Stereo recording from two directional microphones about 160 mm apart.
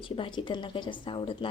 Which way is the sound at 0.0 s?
30° left (ahead or behind).